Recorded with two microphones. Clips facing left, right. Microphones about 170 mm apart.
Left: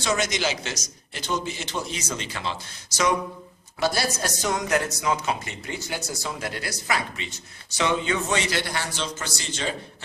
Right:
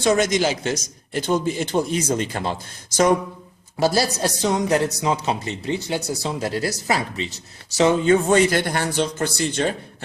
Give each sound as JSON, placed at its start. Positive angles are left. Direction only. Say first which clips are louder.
{"t": 0.0, "sound": "a man's voice", "louder": "right 7 dB", "side_deg": -50}
{"t": 3.8, "sound": "a man's voice", "louder": "right 5 dB", "side_deg": -35}